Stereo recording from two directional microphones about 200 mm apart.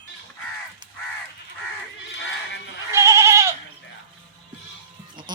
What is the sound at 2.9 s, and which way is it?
Goat, 15° right (ahead or behind).